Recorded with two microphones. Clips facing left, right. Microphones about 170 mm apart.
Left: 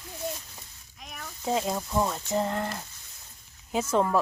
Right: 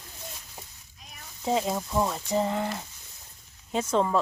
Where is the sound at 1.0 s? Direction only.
65° left (ahead or behind).